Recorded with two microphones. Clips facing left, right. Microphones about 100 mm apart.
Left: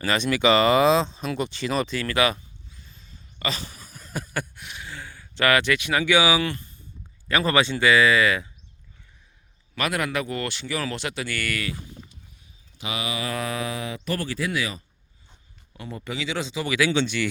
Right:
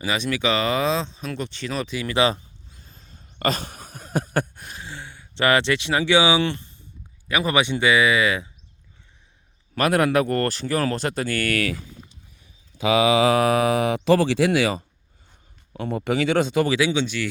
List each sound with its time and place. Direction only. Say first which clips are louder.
0.0 s speech: left 2 dB; 5° right (ahead or behind)
2.0 s speech: right 2 dB; 15° right (ahead or behind)
2.2 s a sound: right 2 dB; 30° right (ahead or behind)
2.8 s a sound: right 1 dB; 45° right (ahead or behind); by 6.7 s 25° right (ahead or behind)
7.3 s speech: even; 15° right (ahead or behind)
9.7 s speech: right 7 dB; 45° right (ahead or behind)
13.1 s speech: right 11 dB; 80° right
15.7 s speech: right 10 dB; 60° right (ahead or behind)
16.6 s speech: right 2 dB; 25° right (ahead or behind)
16.9 s speech: even; 5° right (ahead or behind)